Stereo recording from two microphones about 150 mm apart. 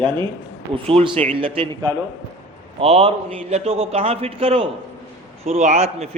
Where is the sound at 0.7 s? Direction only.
40° right (ahead or behind).